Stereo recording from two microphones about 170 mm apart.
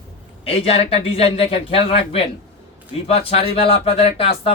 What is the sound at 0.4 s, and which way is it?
Speech, 35° left (ahead or behind).